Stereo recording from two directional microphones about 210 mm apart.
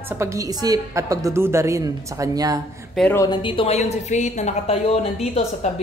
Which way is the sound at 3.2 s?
25° left (ahead or behind).